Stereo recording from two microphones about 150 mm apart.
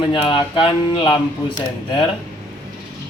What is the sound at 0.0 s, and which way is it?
Speech, 35° left (ahead or behind).